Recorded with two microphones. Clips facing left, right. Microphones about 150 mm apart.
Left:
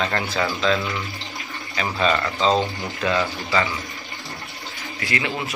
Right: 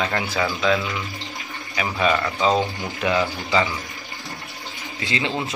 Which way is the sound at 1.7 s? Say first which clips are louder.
Even; 10° right (ahead or behind).